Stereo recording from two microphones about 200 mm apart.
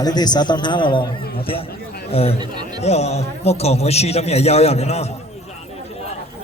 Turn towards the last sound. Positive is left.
turn(degrees=30)  # may be behind; listen again after turning